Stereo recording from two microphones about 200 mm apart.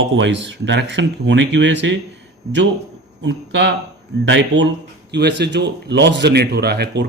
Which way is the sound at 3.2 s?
60° right (ahead or behind).